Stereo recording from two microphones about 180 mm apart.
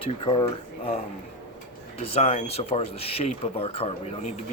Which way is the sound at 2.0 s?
35° left (ahead or behind).